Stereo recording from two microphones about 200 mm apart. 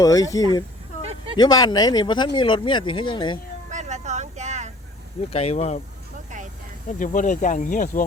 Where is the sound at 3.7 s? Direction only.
35° right (ahead or behind).